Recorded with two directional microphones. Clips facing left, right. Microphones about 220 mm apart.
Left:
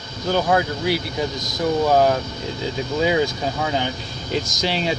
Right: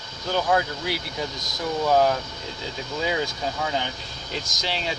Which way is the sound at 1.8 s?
35° left (ahead or behind).